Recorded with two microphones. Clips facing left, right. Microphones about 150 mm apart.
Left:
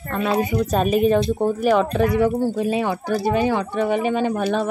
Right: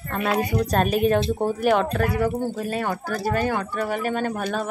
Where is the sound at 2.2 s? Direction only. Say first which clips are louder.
Left 5 dB; 15° left (ahead or behind).